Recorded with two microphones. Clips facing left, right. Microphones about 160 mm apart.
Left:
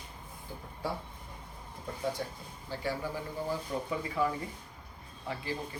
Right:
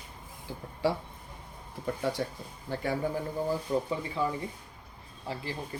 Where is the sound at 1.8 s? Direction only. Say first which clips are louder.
Right 4 dB; 70° right (ahead or behind).